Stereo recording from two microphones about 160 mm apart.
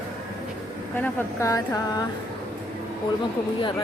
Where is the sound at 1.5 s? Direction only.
20° left (ahead or behind).